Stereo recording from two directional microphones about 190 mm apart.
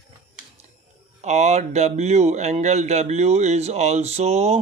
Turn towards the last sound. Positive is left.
turn(degrees=-35)  # may be behind; listen again after turning